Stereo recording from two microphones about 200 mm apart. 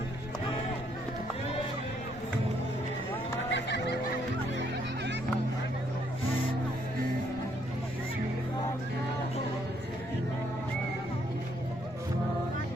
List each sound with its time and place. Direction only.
3.5 s fowl: 60° left (ahead or behind)